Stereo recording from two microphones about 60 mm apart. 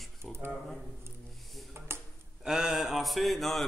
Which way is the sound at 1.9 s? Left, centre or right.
Right.